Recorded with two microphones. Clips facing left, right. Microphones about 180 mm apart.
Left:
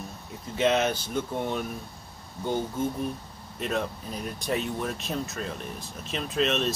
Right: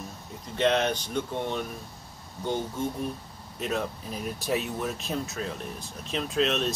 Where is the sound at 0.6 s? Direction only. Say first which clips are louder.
Left 1 dB; 5° left (ahead or behind).